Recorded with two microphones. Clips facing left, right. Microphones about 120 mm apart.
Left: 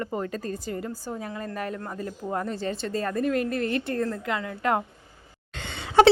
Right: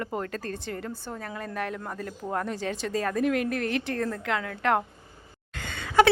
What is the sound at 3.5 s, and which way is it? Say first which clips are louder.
Speech: left 1 dB; 70° right (ahead or behind).